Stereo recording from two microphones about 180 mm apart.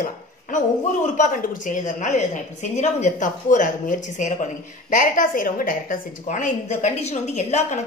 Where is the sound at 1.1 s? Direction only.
45° left (ahead or behind).